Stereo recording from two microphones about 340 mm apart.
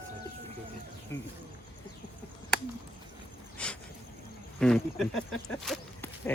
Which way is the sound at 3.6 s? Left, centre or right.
Centre.